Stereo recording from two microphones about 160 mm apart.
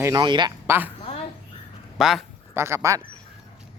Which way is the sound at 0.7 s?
10° right (ahead or behind).